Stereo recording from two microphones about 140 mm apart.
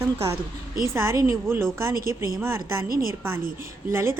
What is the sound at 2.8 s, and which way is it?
Speech, 90° right.